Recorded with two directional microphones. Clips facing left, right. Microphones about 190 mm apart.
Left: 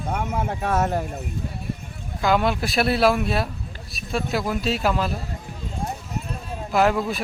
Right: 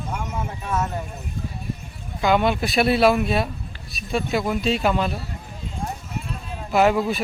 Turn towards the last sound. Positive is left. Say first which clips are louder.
# right 2 dB
turn(degrees=0)  # may be behind; listen again after turning